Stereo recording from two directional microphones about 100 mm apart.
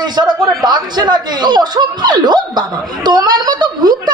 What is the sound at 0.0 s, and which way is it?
A man's voice, 45° right (ahead or behind).